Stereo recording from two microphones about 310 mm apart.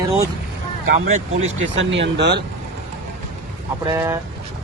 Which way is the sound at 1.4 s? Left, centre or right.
Right.